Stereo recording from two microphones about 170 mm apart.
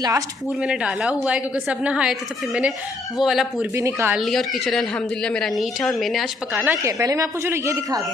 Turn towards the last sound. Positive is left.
turn(degrees=-20)  # may be behind; listen again after turning